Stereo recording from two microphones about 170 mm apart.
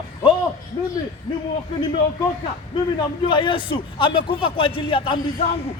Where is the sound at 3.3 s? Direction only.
30° left (ahead or behind).